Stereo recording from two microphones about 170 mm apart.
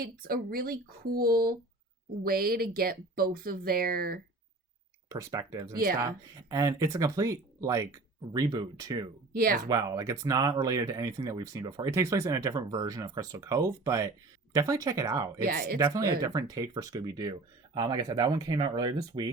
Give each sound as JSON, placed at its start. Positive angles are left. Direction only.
{"t": 0.0, "sound": "speech", "side_deg": -60}
{"t": 5.0, "sound": "speech", "side_deg": -20}
{"t": 9.3, "sound": "speech", "side_deg": -60}
{"t": 9.6, "sound": "speech", "side_deg": -20}
{"t": 15.4, "sound": "speech", "side_deg": -60}
{"t": 15.8, "sound": "speech", "side_deg": -20}